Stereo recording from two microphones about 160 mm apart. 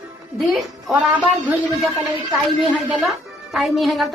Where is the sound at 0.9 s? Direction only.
10° right (ahead or behind).